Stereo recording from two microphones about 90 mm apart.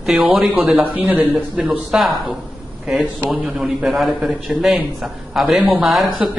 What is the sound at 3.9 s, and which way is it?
A man's voice, centre (ahead or behind).